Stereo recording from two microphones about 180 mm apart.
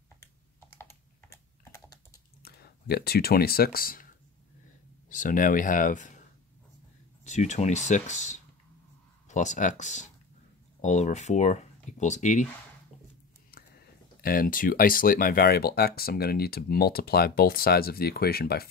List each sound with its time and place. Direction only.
0.7 s typing: 15° left (ahead or behind)
2.4 s speech: 60° left (ahead or behind)
5.1 s speech: 50° left (ahead or behind)
7.2 s speech: 40° left (ahead or behind)
13.5 s speech: 60° left (ahead or behind)